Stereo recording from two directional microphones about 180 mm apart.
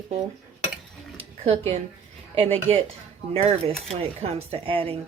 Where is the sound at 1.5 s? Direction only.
35° right (ahead or behind).